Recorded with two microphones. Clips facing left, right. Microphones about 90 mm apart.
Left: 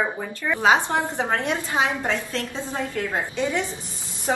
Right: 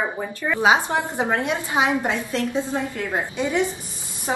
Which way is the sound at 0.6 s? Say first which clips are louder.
Right 1 dB; 15° right (ahead or behind).